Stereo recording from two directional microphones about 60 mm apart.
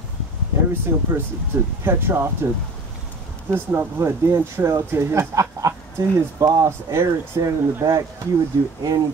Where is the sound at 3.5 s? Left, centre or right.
Right.